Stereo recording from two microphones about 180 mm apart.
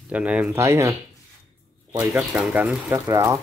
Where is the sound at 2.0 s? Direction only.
5° right (ahead or behind).